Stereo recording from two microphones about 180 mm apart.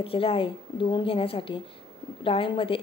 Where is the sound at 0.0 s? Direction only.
30° left (ahead or behind).